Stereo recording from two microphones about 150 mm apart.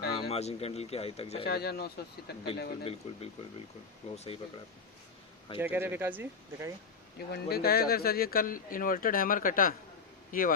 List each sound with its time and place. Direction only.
0.2 s speech: 45° left (ahead or behind)
1.5 s speech: 90° left
2.8 s speech: 40° left (ahead or behind)
5.5 s speech: 15° right (ahead or behind)
7.3 s speech: 90° left; by 10.5 s 70° left (ahead or behind)